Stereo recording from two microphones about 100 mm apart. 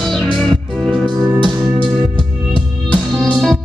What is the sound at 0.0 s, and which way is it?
Music, 5° left (ahead or behind).